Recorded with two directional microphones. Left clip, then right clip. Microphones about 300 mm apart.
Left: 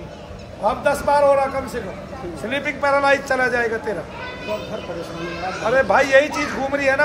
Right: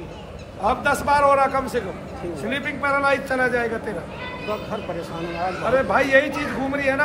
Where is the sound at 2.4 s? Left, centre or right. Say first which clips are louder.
Left 3 dB; left.